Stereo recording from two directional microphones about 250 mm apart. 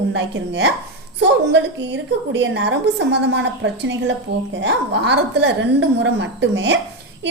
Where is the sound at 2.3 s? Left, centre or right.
Right.